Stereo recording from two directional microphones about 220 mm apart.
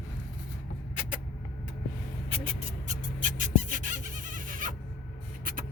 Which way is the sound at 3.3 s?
35° right (ahead or behind).